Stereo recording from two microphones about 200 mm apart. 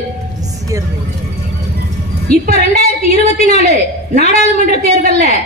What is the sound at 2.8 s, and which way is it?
A woman's voice, 30° left (ahead or behind).